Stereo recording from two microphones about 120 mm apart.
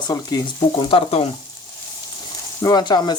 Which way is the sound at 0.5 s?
50° left (ahead or behind).